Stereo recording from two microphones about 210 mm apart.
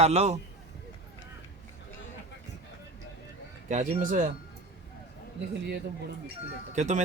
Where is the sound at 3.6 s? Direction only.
35° right (ahead or behind).